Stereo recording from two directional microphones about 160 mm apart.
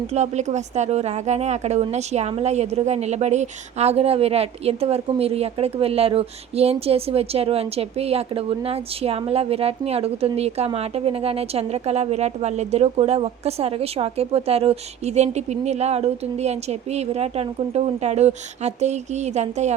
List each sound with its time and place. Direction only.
0.1 s a woman's voice: 45° right (ahead or behind)